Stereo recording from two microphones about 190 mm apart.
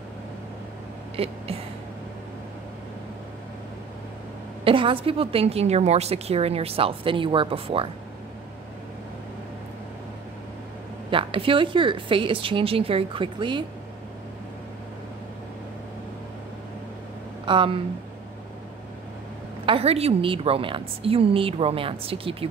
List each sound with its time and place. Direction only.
1.1 s a sound: 30° right (ahead or behind)
4.6 s a woman's voice: 30° right (ahead or behind)
11.1 s a woman's voice: 25° right (ahead or behind)
17.5 s a woman's voice: 25° right (ahead or behind)
19.6 s a woman's voice: 30° right (ahead or behind)